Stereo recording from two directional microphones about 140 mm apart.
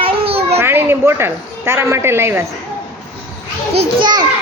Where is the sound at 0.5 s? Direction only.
15° right (ahead or behind).